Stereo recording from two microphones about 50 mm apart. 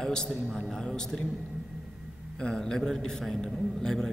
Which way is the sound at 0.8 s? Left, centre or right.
Centre.